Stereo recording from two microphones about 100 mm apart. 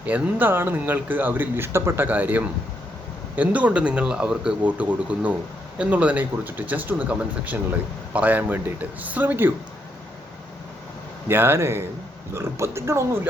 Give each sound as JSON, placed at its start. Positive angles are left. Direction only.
{"t": 0.0, "sound": "speech", "side_deg": -15}
{"t": 11.3, "sound": "speech", "side_deg": -25}